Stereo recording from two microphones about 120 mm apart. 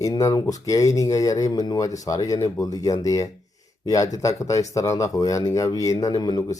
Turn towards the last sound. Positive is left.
turn(degrees=35)  # may be behind; listen again after turning